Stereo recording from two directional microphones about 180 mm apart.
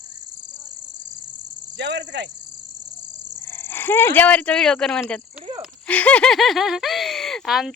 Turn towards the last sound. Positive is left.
turn(degrees=0)  # may be behind; listen again after turning